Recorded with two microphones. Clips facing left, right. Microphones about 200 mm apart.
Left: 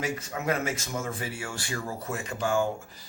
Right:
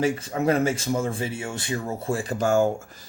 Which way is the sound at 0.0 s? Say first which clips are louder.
Right 8 dB; 30° right (ahead or behind).